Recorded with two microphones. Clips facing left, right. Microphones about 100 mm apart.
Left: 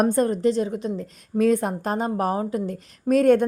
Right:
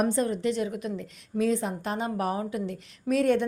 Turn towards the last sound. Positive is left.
turn(degrees=45)  # may be behind; listen again after turning